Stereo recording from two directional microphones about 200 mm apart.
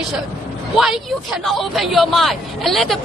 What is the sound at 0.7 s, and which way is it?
Speech, centre (ahead or behind).